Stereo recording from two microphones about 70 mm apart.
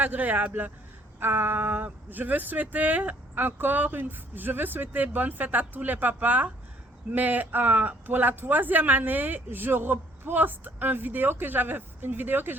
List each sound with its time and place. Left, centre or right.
0.0 s speech: right